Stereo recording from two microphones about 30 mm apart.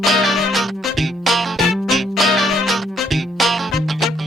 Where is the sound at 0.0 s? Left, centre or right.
Centre.